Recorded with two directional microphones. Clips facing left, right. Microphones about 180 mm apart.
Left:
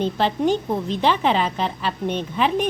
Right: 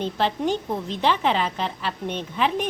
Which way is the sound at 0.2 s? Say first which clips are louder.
Left 2 dB; 15° left (ahead or behind).